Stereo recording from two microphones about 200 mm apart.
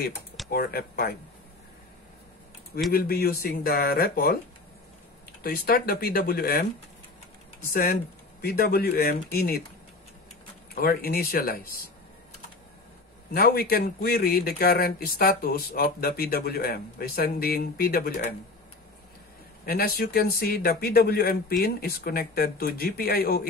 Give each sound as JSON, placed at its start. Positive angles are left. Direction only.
{"t": 0.5, "sound": "speech", "side_deg": 50}
{"t": 2.9, "sound": "speech", "side_deg": 50}
{"t": 5.4, "sound": "speech", "side_deg": 50}
{"t": 7.7, "sound": "speech", "side_deg": 50}
{"t": 10.7, "sound": "speech", "side_deg": 50}
{"t": 13.3, "sound": "speech", "side_deg": 50}
{"t": 19.6, "sound": "speech", "side_deg": 50}